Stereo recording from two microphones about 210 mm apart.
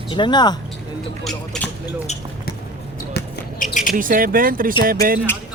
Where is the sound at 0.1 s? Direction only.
20° left (ahead or behind).